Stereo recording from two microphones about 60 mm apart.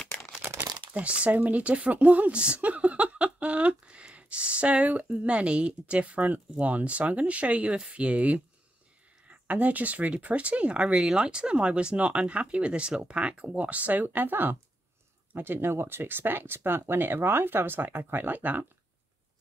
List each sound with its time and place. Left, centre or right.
0.5 s crumpling: right
0.9 s speech: right